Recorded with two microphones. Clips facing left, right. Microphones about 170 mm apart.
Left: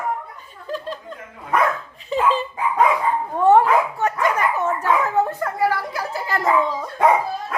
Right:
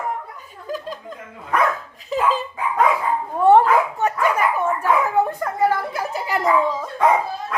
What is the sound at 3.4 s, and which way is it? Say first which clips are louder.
Dog: right 1 dB; 20° right (ahead or behind).